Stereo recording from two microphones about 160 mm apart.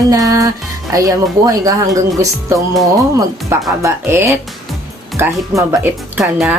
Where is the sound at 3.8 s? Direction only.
15° right (ahead or behind).